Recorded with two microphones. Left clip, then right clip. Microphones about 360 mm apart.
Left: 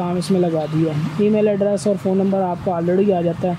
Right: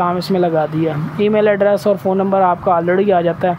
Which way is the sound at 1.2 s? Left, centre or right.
Right.